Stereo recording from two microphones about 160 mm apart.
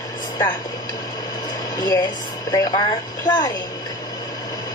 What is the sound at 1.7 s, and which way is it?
A woman's voice, 25° left (ahead or behind).